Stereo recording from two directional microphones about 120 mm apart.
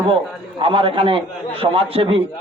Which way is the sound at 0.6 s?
50° right (ahead or behind).